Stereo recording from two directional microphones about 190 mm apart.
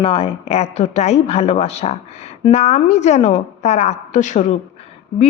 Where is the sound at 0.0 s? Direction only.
30° left (ahead or behind).